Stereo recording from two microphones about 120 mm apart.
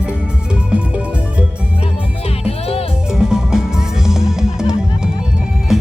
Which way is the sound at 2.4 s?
55° left (ahead or behind).